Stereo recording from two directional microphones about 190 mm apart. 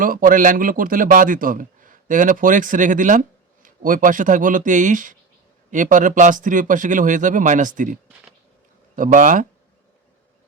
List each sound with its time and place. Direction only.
0.0 s a man's voice: 45° right (ahead or behind)
9.0 s a man's voice: 45° right (ahead or behind)